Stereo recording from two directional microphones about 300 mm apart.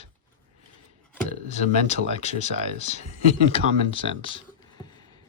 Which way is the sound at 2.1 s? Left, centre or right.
Left.